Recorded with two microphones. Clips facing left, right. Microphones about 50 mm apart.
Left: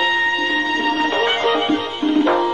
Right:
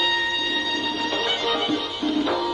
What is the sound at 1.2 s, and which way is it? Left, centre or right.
Music, left.